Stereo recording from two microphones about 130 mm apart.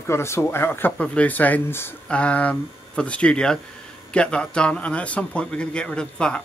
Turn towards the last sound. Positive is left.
turn(degrees=5)  # may be behind; listen again after turning